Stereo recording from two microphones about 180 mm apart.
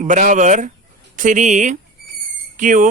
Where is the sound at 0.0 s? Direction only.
45° right (ahead or behind).